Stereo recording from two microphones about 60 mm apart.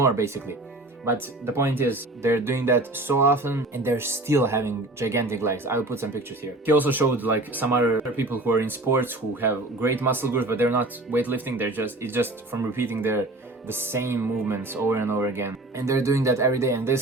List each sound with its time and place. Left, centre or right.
0.0 s speech: right
1.0 s speech: right